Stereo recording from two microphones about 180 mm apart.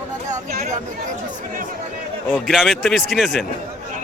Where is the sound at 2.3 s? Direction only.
10° left (ahead or behind).